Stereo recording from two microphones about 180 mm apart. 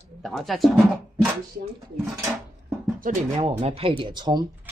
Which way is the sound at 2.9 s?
45° right (ahead or behind).